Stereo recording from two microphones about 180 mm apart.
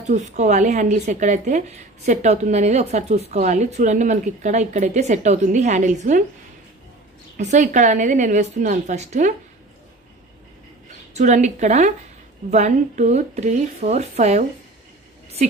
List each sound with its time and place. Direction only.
0.0 s speech: 40° right (ahead or behind)
7.3 s a woman's voice: 40° right (ahead or behind)
11.1 s speech: 40° right (ahead or behind)